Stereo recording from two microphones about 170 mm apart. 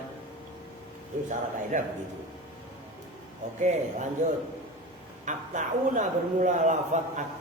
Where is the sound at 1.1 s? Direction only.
50° right (ahead or behind).